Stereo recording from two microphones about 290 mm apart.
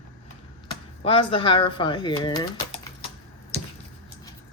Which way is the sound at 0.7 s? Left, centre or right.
Centre.